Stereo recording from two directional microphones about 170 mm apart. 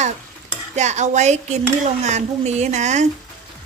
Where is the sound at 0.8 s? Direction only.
40° right (ahead or behind).